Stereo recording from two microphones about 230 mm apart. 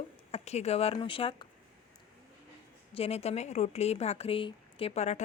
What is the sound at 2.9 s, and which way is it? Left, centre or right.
A woman's voice, left.